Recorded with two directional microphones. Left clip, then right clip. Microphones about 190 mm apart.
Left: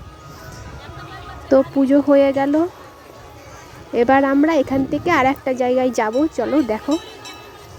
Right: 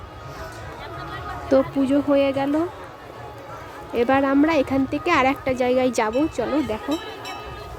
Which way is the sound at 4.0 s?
15° left (ahead or behind).